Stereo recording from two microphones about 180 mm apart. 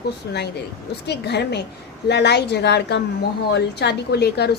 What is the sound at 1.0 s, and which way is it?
A woman's voice, 70° left (ahead or behind).